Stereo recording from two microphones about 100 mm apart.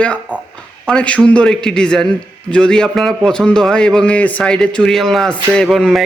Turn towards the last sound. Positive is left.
turn(degrees=0)  # may be behind; listen again after turning